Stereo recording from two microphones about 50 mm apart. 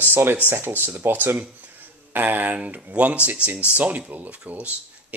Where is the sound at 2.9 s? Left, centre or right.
Right.